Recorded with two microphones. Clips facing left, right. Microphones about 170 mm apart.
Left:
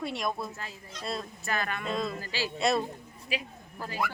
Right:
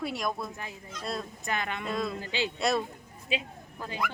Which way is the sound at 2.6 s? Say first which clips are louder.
Left 2 dB; centre (ahead or behind).